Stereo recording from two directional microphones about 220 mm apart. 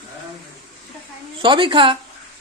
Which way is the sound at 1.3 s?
20° right (ahead or behind).